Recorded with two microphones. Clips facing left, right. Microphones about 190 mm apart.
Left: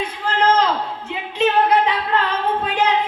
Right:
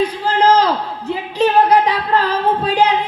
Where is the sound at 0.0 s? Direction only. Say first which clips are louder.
Right 5 dB; 35° right (ahead or behind).